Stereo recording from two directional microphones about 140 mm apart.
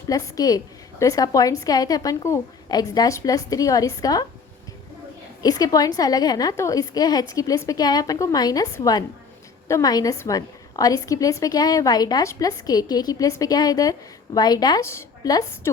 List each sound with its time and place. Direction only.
0.1 s a woman's voice: 25° left (ahead or behind)
5.4 s a woman's voice: 25° left (ahead or behind)